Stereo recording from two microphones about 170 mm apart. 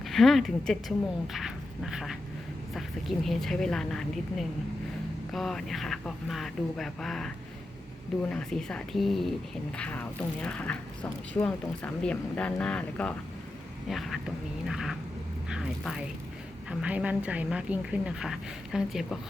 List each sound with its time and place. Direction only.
0.0 s speech: centre (ahead or behind)
8.3 s a woman's voice: 5° left (ahead or behind)